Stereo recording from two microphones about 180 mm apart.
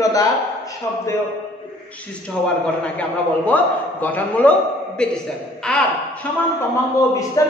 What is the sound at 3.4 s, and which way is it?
A man's voice, 10° left (ahead or behind).